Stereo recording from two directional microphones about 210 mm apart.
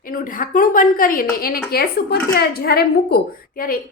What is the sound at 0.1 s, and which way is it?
A woman's voice, 40° left (ahead or behind).